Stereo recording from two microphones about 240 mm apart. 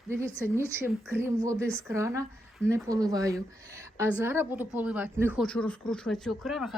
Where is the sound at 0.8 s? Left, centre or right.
Centre.